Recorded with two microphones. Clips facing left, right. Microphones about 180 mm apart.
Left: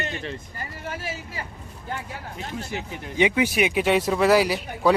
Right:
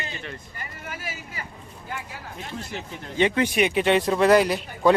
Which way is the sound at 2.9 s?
10° left (ahead or behind).